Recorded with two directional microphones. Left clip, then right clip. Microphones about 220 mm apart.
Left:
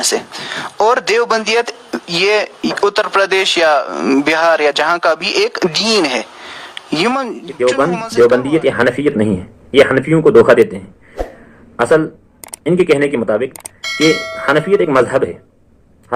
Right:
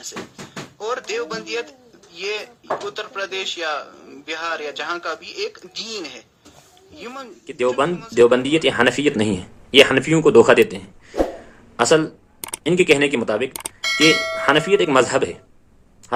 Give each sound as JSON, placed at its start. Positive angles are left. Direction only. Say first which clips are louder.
{"t": 0.8, "sound": "speech", "louder": "left 13 dB", "side_deg": 55}
{"t": 8.3, "sound": "speech", "louder": "left 4 dB", "side_deg": -20}
{"t": 11.1, "sound": "cough", "louder": "right 3 dB", "side_deg": 0}
{"t": 11.8, "sound": "speech", "louder": "left 4 dB", "side_deg": -20}
{"t": 13.5, "sound": "speech", "louder": "even", "side_deg": 0}
{"t": 14.4, "sound": "speech", "louder": "left 5 dB", "side_deg": -20}